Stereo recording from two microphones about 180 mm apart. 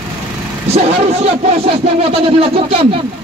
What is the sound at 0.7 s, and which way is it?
Speech, 35° right (ahead or behind).